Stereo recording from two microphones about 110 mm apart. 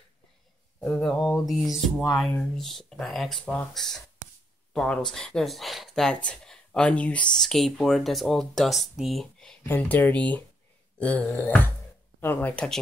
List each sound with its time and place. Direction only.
0.7 s speech: 10° left (ahead or behind)
9.6 s speech: 20° left (ahead or behind)